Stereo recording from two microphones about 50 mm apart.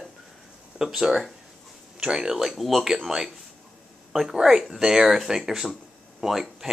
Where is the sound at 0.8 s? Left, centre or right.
Centre.